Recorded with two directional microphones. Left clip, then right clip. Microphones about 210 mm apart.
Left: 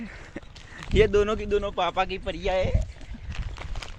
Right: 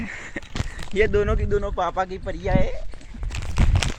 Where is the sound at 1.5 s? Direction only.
25° right (ahead or behind).